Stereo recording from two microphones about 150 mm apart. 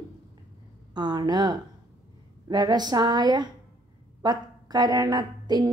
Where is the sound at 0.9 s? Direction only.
30° right (ahead or behind).